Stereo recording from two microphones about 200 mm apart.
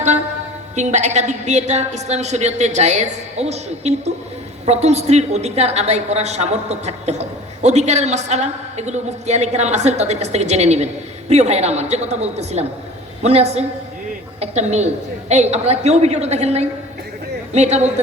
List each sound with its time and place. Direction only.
0.8 s a woman's voice: 35° right (ahead or behind)